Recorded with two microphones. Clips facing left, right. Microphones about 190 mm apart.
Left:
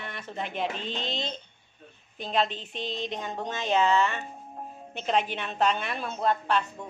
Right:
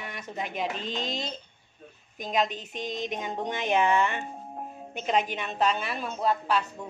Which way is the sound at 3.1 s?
15° right (ahead or behind).